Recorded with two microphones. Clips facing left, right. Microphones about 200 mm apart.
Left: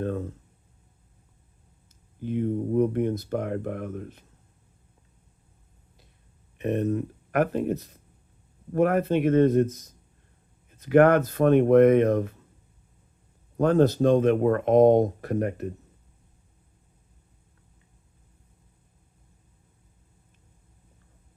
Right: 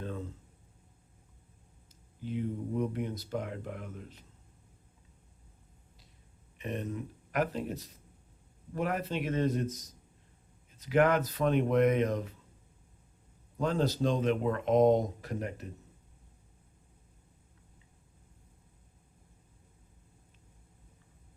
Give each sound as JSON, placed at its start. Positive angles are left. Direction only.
{"t": 0.0, "sound": "speech", "side_deg": 55}
{"t": 2.2, "sound": "speech", "side_deg": 55}
{"t": 6.6, "sound": "speech", "side_deg": 50}
{"t": 13.6, "sound": "speech", "side_deg": 55}